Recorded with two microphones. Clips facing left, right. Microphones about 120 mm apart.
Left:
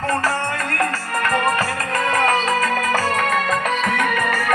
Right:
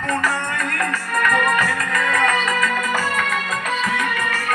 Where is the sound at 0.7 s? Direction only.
30° left (ahead or behind); by 4.4 s 55° left (ahead or behind).